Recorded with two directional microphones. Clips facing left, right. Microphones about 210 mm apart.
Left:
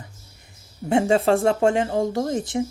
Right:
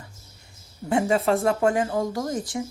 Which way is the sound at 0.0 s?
20° left (ahead or behind).